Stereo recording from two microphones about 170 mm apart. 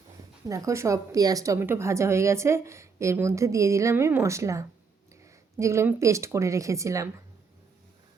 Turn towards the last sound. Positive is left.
turn(degrees=-20)  # may be behind; listen again after turning